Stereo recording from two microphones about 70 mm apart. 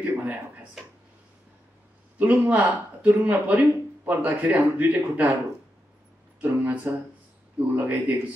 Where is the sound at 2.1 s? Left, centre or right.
Right.